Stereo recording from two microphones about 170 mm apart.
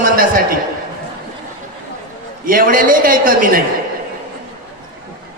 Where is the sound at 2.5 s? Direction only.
55° right (ahead or behind).